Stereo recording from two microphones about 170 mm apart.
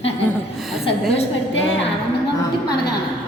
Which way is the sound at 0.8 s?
35° left (ahead or behind).